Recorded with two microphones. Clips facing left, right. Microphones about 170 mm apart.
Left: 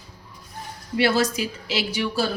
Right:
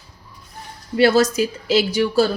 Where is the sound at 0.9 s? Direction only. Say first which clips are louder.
Right 6 dB; 45° right (ahead or behind).